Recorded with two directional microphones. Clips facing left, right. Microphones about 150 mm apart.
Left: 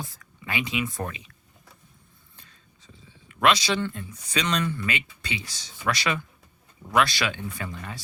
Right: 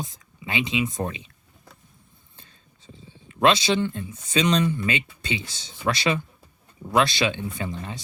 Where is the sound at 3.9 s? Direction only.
25° right (ahead or behind).